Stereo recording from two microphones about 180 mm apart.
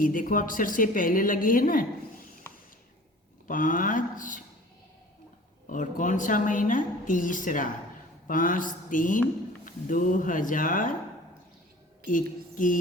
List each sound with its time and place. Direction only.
0.0 s a woman's voice: 50° left (ahead or behind)
3.4 s a woman's voice: 45° left (ahead or behind)
5.6 s a woman's voice: 45° left (ahead or behind)
12.0 s a sound: 45° left (ahead or behind)